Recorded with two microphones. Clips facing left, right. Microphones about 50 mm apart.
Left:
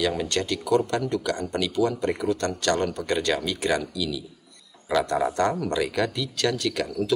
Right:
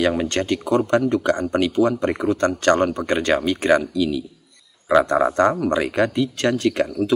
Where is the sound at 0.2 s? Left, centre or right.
Right.